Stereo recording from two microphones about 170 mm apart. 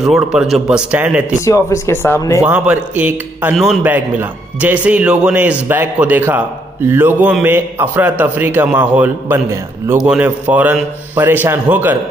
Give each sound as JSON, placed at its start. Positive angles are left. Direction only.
{"t": 0.0, "sound": "speech", "side_deg": -5}
{"t": 1.4, "sound": "speech", "side_deg": 20}
{"t": 2.4, "sound": "a man's voice", "side_deg": -5}